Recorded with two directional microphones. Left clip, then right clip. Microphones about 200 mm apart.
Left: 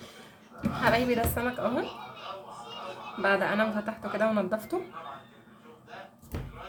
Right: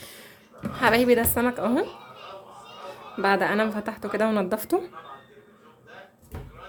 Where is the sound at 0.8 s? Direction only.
50° right (ahead or behind).